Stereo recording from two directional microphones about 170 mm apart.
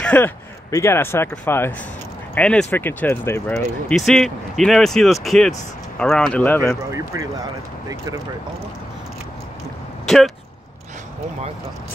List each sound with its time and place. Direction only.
0.0 s speech: 10° left (ahead or behind)
3.9 s speech: centre (ahead or behind)
6.9 s speech: 20° right (ahead or behind)
10.0 s a sound: centre (ahead or behind)